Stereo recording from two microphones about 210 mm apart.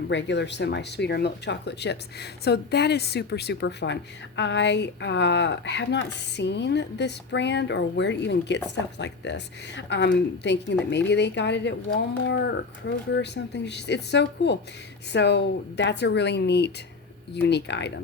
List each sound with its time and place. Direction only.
0.1 s a woman's voice: 60° left (ahead or behind)